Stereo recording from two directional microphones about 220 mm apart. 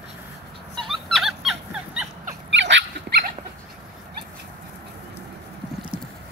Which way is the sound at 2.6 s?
50° right (ahead or behind).